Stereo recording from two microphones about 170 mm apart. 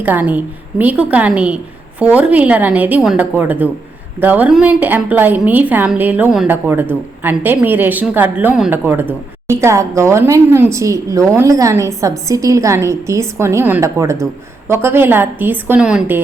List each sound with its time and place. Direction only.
0.0 s a woman's voice: 10° right (ahead or behind)